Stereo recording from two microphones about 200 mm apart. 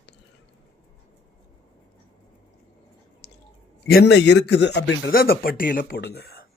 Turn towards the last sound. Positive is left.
turn(degrees=50)  # may be behind; listen again after turning